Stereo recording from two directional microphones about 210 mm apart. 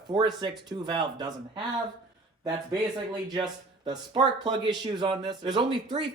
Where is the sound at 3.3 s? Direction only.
20° right (ahead or behind).